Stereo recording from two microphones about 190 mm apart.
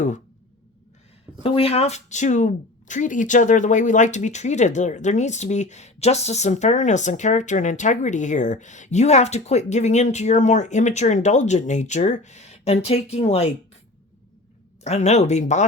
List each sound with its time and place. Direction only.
1.5 s speech: 30° left (ahead or behind)
14.8 s speech: 35° left (ahead or behind)